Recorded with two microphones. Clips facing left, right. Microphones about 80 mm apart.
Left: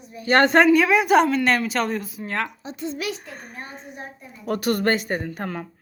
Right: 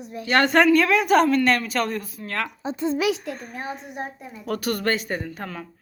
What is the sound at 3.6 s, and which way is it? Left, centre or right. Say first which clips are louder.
Speech: right 5 dB; right.